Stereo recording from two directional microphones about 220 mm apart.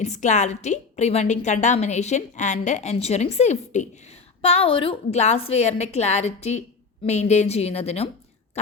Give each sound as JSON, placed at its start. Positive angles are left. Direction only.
{"t": 0.0, "sound": "a woman's voice", "side_deg": 30}